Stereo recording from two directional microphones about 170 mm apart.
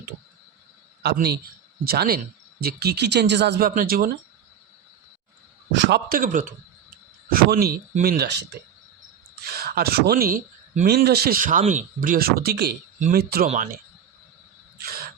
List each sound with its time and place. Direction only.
1.0 s speech: 70° right (ahead or behind)
3.8 s speech: 60° right (ahead or behind)
5.7 s speech: 85° right
9.5 s speech: 65° right (ahead or behind)
14.8 s crow: 65° right (ahead or behind)